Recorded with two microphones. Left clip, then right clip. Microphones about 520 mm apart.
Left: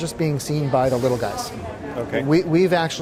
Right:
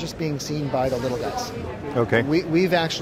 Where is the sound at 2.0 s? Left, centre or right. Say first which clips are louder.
Right 6 dB; right.